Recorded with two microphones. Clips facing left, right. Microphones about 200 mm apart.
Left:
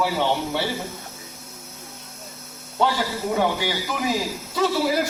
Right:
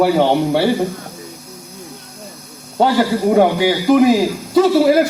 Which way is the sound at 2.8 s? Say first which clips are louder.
Right 9 dB; 65° right (ahead or behind).